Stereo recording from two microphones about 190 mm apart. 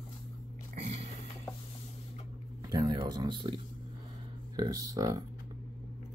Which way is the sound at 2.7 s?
20° right (ahead or behind).